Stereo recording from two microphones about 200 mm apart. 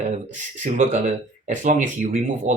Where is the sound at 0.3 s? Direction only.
40° right (ahead or behind).